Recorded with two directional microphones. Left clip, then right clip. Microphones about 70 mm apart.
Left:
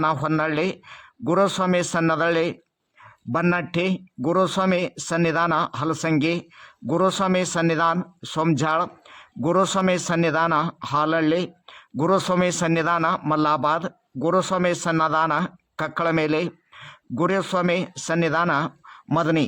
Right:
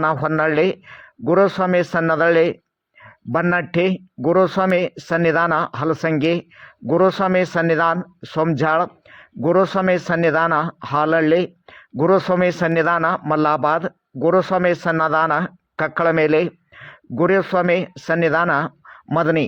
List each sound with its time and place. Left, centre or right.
0.0 s a man's voice: right